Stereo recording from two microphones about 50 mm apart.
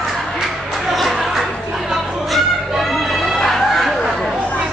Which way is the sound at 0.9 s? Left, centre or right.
Centre.